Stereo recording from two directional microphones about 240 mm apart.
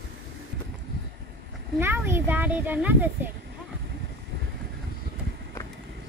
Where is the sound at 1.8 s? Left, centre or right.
Centre.